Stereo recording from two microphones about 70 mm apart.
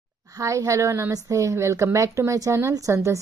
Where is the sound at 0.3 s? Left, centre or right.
Right.